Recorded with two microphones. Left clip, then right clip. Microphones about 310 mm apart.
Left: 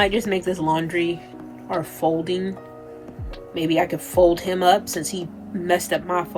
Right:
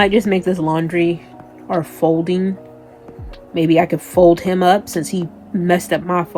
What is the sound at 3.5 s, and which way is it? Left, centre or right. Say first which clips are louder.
Speech: right 7 dB; centre.